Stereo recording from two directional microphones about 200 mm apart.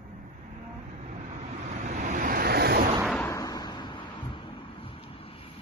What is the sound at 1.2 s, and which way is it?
Waves, 35° right (ahead or behind).